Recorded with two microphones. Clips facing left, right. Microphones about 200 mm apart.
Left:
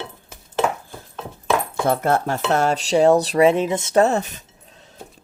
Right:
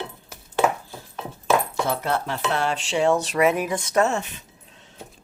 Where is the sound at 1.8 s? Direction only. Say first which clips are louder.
Left 6 dB; 50° left (ahead or behind).